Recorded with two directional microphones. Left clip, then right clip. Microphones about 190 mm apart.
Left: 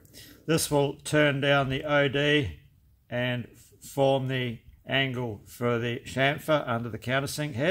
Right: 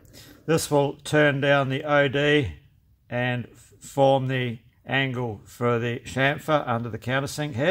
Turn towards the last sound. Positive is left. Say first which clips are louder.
# right 3 dB
turn(degrees=-25)  # may be behind; listen again after turning